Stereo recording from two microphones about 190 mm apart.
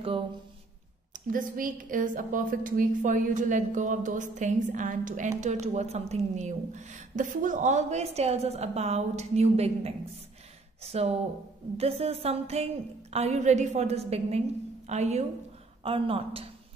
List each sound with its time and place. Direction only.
1.1 s a woman's voice: 45° right (ahead or behind)